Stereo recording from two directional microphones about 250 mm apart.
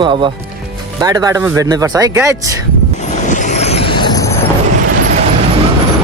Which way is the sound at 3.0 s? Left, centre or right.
Left.